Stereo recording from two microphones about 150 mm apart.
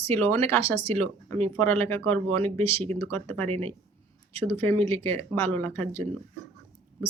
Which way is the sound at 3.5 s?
45° right (ahead or behind).